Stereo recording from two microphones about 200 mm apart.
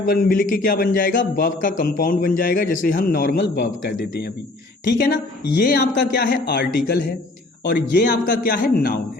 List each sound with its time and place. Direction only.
0.1 s a man's voice: 45° left (ahead or behind)